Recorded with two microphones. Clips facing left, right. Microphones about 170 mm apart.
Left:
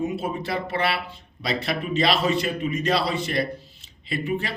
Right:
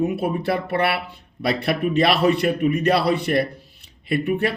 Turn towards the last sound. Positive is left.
turn(degrees=-60)  # may be behind; listen again after turning